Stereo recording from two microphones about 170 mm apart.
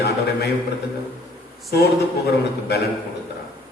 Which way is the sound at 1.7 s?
75° left (ahead or behind).